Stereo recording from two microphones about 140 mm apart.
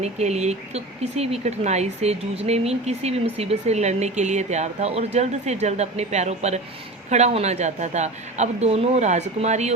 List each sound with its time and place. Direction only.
0.0 s speech: 50° right (ahead or behind)